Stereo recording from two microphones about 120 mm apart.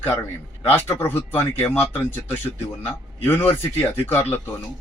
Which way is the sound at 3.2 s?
15° left (ahead or behind).